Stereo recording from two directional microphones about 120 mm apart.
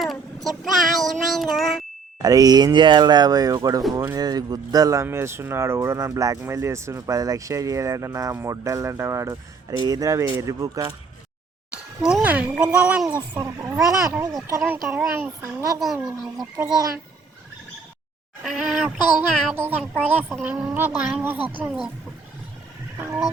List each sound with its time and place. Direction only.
0.0 s child singing: centre (ahead or behind)
2.2 s speech: 30° right (ahead or behind)
12.0 s speech: 10° right (ahead or behind)
13.3 s speech: 20° right (ahead or behind)
14.8 s music: 5° right (ahead or behind)
15.1 s speech: 20° right (ahead or behind)
16.0 s music: 10° right (ahead or behind)
18.4 s music: 5° right (ahead or behind)
19.5 s speech: 15° right (ahead or behind)
23.0 s speech: 20° right (ahead or behind)